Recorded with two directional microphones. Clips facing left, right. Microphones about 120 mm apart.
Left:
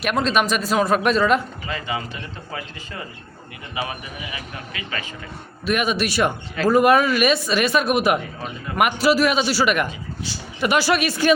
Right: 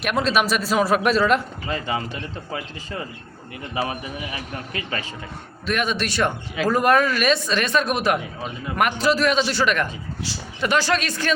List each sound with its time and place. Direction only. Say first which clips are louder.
0.0 s speech: left 1 dB; centre (ahead or behind)
3.8 s a man's voice: right 3 dB; 40° right (ahead or behind)
5.6 s speech: left 2 dB; 10° left (ahead or behind)